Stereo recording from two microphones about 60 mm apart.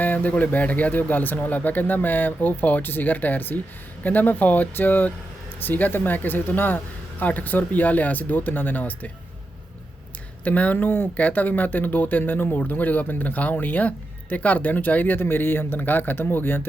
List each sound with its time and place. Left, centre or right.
0.0 s speech: left
10.4 s speech: left